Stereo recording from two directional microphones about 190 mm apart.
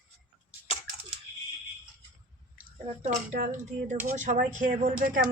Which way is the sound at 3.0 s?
40° right (ahead or behind).